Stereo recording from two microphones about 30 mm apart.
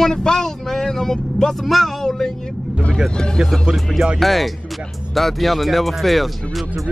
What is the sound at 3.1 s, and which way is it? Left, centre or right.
Speech, left.